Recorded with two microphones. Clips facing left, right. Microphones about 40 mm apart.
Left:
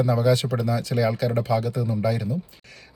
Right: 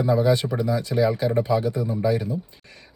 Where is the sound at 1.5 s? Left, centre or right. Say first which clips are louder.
Right 1 dB; right.